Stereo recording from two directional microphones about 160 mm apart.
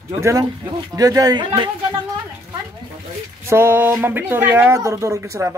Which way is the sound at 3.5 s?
15° right (ahead or behind).